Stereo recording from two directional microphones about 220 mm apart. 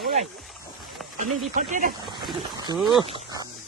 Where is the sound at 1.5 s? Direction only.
35° right (ahead or behind).